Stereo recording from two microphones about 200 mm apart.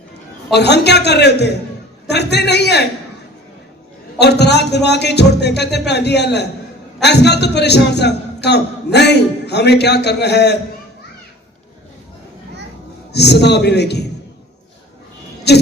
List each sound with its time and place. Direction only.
0.5 s a man's voice: 55° left (ahead or behind)
4.2 s a man's voice: 55° left (ahead or behind)
13.1 s a man's voice: 55° left (ahead or behind)
15.5 s a man's voice: 55° left (ahead or behind)